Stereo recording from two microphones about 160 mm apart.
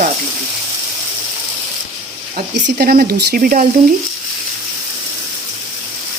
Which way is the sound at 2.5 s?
70° right (ahead or behind).